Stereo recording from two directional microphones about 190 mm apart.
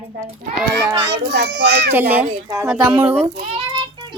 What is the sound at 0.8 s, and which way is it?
Speech, 20° right (ahead or behind).